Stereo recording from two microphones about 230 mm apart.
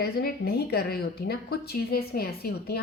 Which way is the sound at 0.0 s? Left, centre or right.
Left.